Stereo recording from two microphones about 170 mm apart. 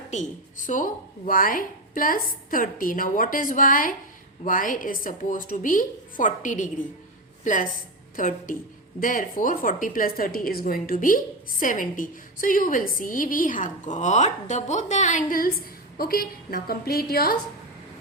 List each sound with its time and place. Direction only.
0.1 s a woman's voice: 45° left (ahead or behind); by 17.3 s 65° left (ahead or behind)